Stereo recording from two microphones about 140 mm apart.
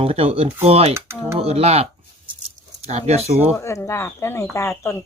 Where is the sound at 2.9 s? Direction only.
50° right (ahead or behind).